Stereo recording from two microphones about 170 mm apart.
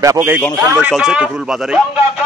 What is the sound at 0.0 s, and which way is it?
A man's voice, 15° right (ahead or behind).